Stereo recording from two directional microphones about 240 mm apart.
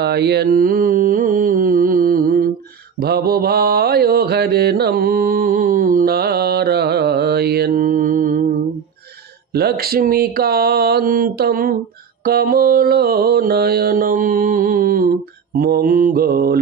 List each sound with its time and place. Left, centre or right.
0.0 s mantra: right
9.5 s mantra: right